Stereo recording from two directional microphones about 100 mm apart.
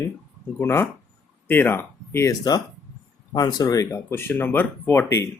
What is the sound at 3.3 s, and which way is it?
Speech, 40° left (ahead or behind).